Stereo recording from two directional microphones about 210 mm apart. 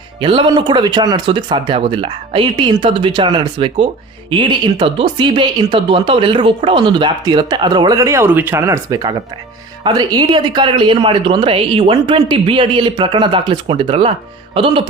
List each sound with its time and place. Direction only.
0.2 s speech: 25° right (ahead or behind)